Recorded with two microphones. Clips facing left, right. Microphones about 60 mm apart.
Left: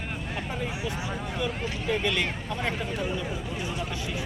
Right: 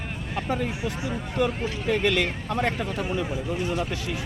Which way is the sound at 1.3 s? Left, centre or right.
Right.